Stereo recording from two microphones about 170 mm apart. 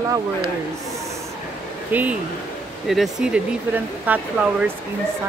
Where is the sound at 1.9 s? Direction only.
10° right (ahead or behind).